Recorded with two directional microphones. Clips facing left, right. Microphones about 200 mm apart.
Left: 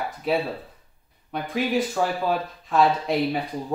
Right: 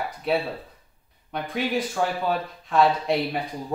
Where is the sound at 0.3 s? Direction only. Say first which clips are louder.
Left 1 dB; centre (ahead or behind).